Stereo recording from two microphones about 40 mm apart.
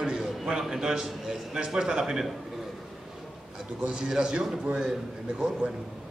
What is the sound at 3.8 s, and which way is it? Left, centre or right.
Speech, centre.